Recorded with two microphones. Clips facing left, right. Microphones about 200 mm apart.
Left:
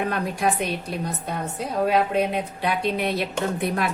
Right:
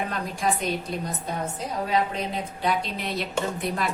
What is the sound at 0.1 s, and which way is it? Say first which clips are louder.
Speech: left 3 dB; 60° left (ahead or behind).